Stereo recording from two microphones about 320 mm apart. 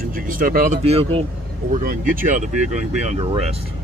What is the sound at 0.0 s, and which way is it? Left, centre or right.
Speech, right.